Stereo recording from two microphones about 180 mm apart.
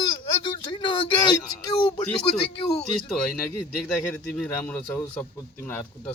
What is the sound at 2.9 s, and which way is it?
A man's voice, 5° left (ahead or behind).